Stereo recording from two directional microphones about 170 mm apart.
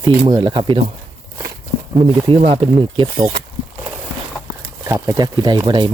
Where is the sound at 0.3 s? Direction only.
25° right (ahead or behind).